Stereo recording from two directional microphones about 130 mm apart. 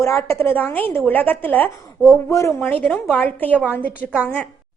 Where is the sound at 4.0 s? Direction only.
10° right (ahead or behind).